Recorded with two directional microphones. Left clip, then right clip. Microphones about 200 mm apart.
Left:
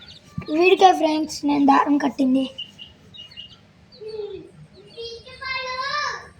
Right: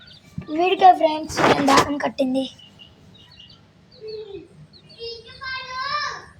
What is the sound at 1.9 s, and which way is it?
Speech, 50° right (ahead or behind).